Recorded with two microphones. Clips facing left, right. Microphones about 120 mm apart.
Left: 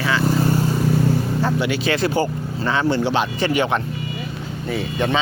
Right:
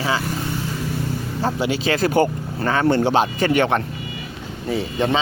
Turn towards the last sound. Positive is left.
turn(degrees=-30)  # may be behind; listen again after turning